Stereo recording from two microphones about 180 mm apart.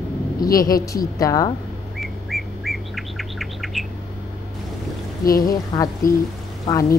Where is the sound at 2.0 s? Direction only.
Centre (ahead or behind).